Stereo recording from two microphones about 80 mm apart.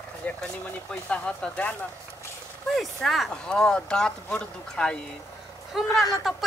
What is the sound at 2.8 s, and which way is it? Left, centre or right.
Speech, centre.